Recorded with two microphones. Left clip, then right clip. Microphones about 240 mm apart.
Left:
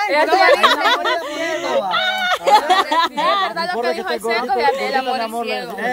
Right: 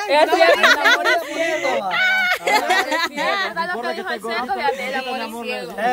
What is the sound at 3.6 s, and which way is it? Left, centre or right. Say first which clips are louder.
Speech: left 3 dB; left.